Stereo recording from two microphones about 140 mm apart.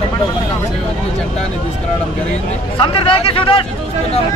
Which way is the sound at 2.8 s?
40° left (ahead or behind).